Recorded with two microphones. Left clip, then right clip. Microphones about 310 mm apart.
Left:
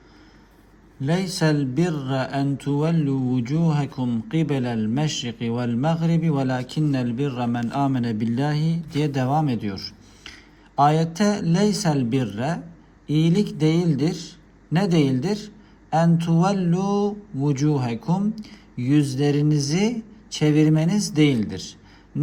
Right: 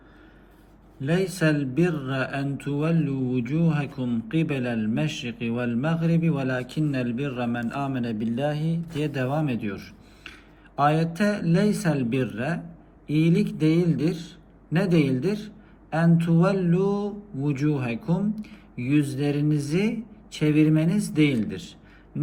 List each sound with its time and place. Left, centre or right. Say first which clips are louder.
1.0 s speech: left 1 dB; centre